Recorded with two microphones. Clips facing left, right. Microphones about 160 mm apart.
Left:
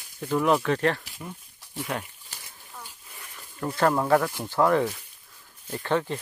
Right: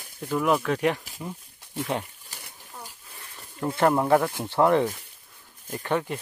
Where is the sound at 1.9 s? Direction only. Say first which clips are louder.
Right 3 dB; 25° right (ahead or behind).